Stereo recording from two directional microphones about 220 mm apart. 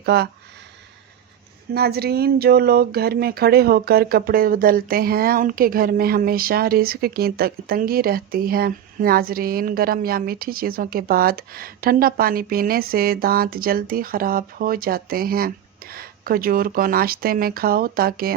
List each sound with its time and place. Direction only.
0.0 s speech: 45° right (ahead or behind)
1.7 s speech: 45° right (ahead or behind)